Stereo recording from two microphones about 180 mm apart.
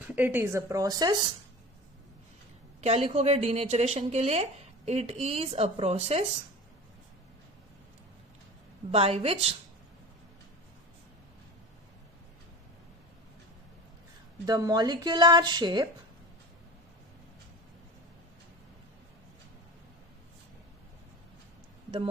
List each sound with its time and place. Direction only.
0.1 s a woman's voice: 10° right (ahead or behind)
2.8 s a woman's voice: 35° right (ahead or behind)
8.9 s a woman's voice: 35° right (ahead or behind)
14.4 s a woman's voice: 20° right (ahead or behind)